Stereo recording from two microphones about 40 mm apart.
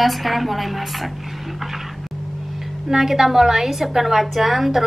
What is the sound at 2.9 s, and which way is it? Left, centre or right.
A woman's voice, centre.